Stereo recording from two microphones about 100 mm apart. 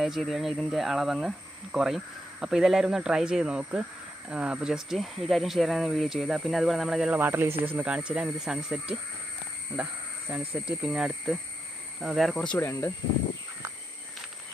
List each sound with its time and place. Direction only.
0.2 s speech: centre (ahead or behind)
7.2 s speech: 20° right (ahead or behind); by 12.4 s centre (ahead or behind)
12.4 s speech: 15° left (ahead or behind)
12.6 s speech: 25° left (ahead or behind)